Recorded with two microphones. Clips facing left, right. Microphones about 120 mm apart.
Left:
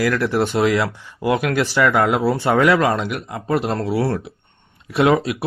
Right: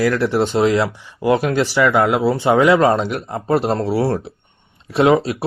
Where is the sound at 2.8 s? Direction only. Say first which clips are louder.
Right 4 dB; 30° right (ahead or behind).